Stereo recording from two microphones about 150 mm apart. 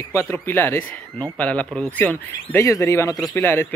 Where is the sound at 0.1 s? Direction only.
15° left (ahead or behind).